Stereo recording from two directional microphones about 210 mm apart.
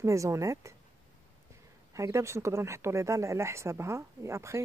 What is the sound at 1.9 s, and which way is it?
Speech, 15° right (ahead or behind).